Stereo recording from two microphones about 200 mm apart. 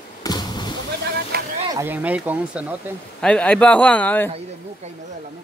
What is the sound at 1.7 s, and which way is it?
Speech, 10° right (ahead or behind).